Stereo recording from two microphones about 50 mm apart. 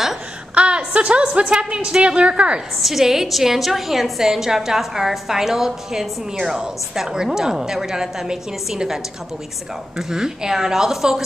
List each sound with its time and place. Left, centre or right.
0.6 s a woman's voice: right
2.8 s a woman's voice: centre